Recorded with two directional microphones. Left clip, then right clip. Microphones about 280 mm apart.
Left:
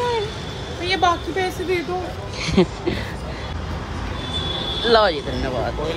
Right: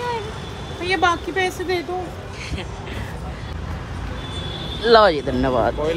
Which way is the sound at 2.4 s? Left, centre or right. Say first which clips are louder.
Left 14 dB; centre.